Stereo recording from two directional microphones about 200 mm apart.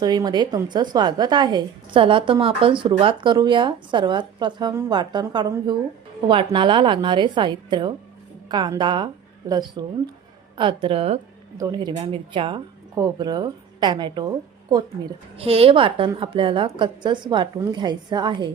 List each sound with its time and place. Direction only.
0.0 s a woman's voice: 20° right (ahead or behind)
11.5 s a woman's voice: 20° right (ahead or behind)